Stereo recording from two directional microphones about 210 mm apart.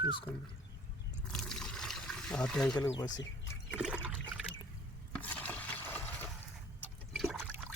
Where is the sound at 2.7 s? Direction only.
20° left (ahead or behind).